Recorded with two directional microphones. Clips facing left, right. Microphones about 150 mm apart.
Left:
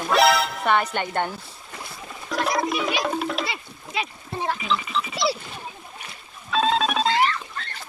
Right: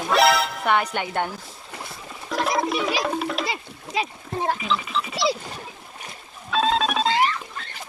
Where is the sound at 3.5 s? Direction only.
40° right (ahead or behind).